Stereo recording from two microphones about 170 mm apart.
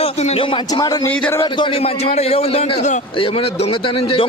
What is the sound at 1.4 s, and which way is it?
A man's voice, 30° left (ahead or behind).